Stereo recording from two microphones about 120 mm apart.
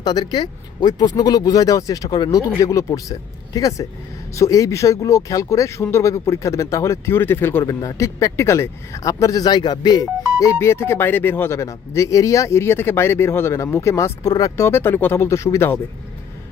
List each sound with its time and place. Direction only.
0.0 s speech: 35° left (ahead or behind); by 7.6 s 20° left (ahead or behind)
7.6 s speech: 30° left (ahead or behind)
10.4 s speech: 20° left (ahead or behind)
14.5 s speech: 20° left (ahead or behind)